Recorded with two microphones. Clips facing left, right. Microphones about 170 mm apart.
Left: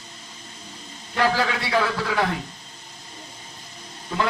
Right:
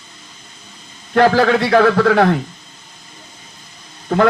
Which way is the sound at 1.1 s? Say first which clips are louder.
Right 10 dB; 65° right (ahead or behind).